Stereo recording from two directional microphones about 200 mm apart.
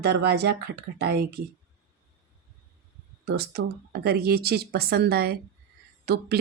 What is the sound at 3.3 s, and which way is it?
Speech, 55° right (ahead or behind).